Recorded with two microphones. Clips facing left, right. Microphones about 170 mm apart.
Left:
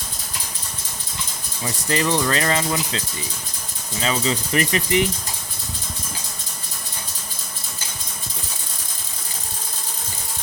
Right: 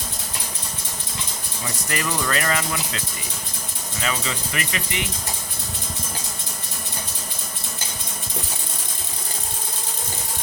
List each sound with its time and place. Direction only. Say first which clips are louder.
1.9 s speech: left 5 dB; 25° left (ahead or behind)
4.0 s speech: left 5 dB; 30° left (ahead or behind)